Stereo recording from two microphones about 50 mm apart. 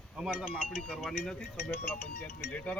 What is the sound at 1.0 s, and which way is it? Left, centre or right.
Speech, centre.